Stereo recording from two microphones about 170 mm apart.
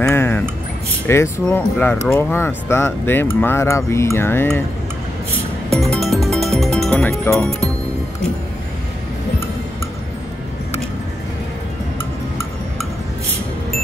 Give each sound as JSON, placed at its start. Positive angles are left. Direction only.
{"t": 0.0, "sound": "a sound", "side_deg": 10}
{"t": 1.0, "sound": "speech", "side_deg": 15}
{"t": 5.8, "sound": "music", "side_deg": 0}
{"t": 7.3, "sound": "speech", "side_deg": 0}